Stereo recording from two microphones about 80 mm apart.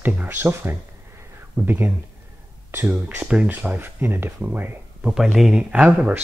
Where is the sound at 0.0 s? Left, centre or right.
Right.